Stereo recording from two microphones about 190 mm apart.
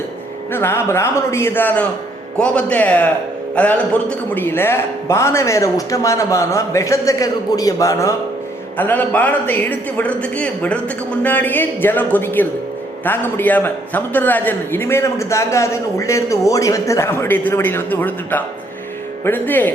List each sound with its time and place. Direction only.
0.5 s a man's voice: 15° left (ahead or behind)